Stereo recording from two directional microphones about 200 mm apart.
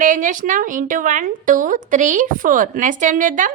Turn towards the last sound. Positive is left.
turn(degrees=-40)  # may be behind; listen again after turning